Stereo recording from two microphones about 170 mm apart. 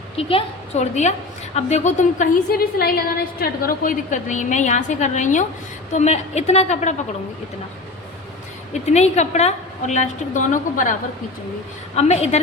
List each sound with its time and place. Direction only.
0.2 s a woman's voice: 35° left (ahead or behind)
8.9 s a woman's voice: 40° left (ahead or behind)
11.9 s speech: 40° left (ahead or behind)